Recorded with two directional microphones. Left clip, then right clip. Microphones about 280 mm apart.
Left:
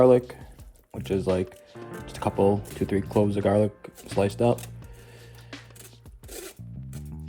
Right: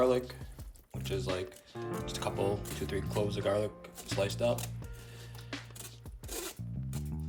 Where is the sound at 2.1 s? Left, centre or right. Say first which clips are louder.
Left 11 dB; centre.